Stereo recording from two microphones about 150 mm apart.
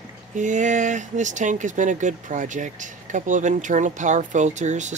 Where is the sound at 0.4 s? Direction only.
55° right (ahead or behind).